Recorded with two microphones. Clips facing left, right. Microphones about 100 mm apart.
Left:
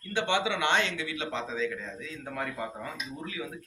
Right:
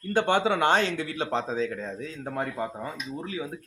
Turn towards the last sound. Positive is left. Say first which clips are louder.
# right 4 dB
turn(degrees=-30)  # may be behind; listen again after turning